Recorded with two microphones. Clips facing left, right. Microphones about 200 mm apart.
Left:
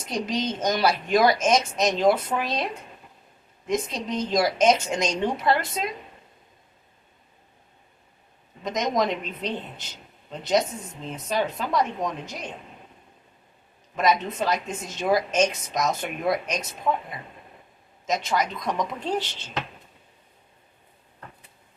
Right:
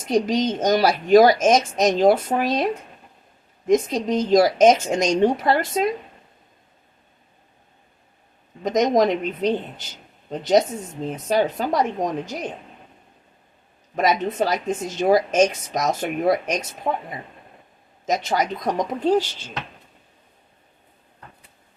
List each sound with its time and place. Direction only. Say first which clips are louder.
0.1 s a woman's voice: right 7 dB; 45° right (ahead or behind)
3.7 s a woman's voice: right 8 dB; 45° right (ahead or behind)
8.6 s a woman's voice: right 7 dB; 45° right (ahead or behind)
13.9 s a woman's voice: right 2 dB; 45° right (ahead or behind)
16.9 s a woman's voice: even; 30° right (ahead or behind)
18.0 s a woman's voice: right 3 dB; 40° right (ahead or behind)